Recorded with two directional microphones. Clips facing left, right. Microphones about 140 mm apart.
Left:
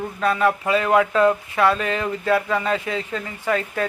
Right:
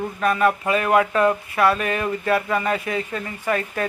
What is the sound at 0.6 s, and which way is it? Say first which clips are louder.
Speech: left 1 dB; 20° left (ahead or behind).